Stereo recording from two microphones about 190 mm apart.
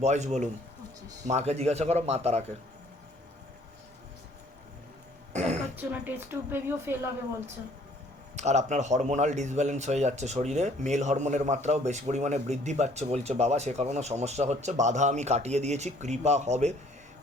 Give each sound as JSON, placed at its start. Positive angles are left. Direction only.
{"t": 0.0, "sound": "speech", "side_deg": -35}
{"t": 5.3, "sound": "throat clearing", "side_deg": -35}
{"t": 5.7, "sound": "a woman's voice", "side_deg": -10}
{"t": 8.4, "sound": "speech", "side_deg": -35}